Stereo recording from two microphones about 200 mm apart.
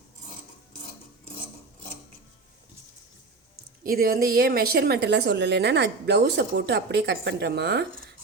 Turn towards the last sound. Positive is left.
turn(degrees=-55)  # may be behind; listen again after turning